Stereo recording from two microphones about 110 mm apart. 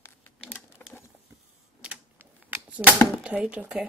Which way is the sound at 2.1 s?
20° right (ahead or behind).